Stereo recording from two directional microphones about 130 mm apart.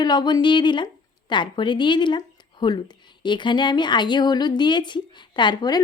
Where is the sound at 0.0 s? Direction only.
35° left (ahead or behind).